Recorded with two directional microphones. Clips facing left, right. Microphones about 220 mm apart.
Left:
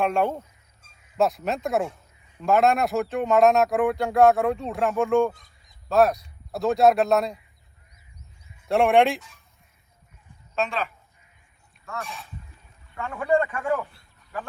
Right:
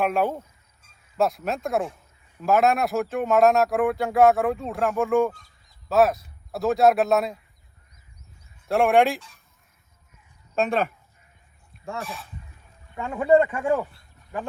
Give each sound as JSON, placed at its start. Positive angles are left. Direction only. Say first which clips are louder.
{"t": 0.0, "sound": "speech", "louder": "even", "side_deg": -5}
{"t": 5.3, "sound": "a sound", "louder": "even", "side_deg": 20}
{"t": 5.9, "sound": "speech", "louder": "even", "side_deg": -5}
{"t": 8.6, "sound": "speech", "louder": "even", "side_deg": 0}
{"t": 10.5, "sound": "speech", "louder": "right 4 dB", "side_deg": -50}
{"t": 13.0, "sound": "speech", "louder": "right 4 dB", "side_deg": -20}